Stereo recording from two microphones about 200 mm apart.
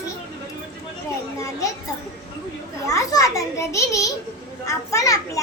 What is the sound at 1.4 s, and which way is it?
Speech, 15° left (ahead or behind).